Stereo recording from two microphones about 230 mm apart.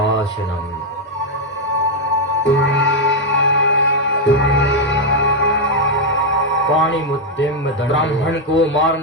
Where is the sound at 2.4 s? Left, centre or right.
Left.